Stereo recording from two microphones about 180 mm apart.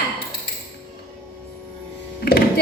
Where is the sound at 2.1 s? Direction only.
55° left (ahead or behind).